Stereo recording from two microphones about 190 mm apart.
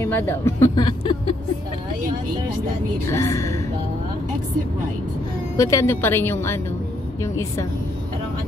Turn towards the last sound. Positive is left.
turn(degrees=15)  # may be behind; listen again after turning